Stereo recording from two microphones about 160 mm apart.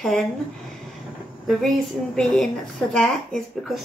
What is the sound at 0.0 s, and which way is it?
Speech, 5° left (ahead or behind).